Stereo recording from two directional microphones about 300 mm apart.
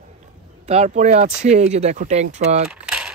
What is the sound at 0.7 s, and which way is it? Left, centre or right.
Speech, right.